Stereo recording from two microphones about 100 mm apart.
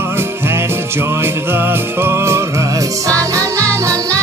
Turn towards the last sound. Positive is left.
turn(degrees=-30)  # may be behind; listen again after turning